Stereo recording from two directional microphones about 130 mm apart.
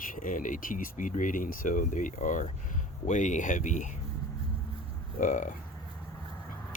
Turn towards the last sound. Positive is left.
turn(degrees=80)